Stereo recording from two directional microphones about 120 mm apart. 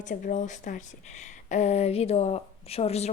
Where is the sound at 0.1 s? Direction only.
90° left.